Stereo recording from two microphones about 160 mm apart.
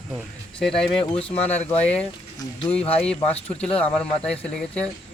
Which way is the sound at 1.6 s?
10° left (ahead or behind).